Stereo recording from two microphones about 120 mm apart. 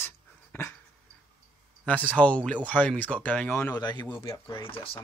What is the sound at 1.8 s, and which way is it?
Speech, 10° left (ahead or behind).